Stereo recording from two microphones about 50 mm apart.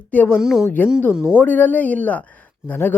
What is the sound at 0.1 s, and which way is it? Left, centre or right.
Speech, left.